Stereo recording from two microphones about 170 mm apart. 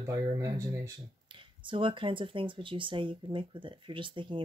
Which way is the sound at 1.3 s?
30° right (ahead or behind).